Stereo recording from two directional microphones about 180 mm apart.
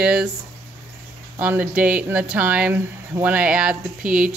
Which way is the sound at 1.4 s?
10° right (ahead or behind).